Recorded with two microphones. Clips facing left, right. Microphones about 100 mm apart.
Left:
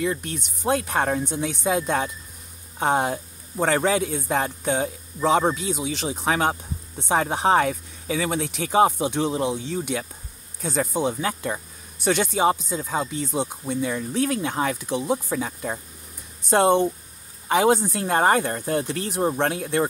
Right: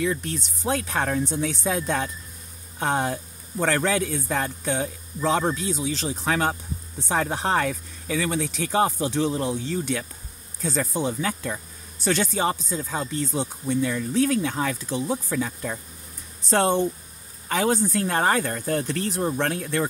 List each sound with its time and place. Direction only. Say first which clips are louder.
0.9 s speech: left 1 dB; 20° left (ahead or behind)